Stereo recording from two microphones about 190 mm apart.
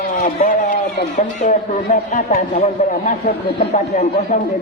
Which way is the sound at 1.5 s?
40° left (ahead or behind).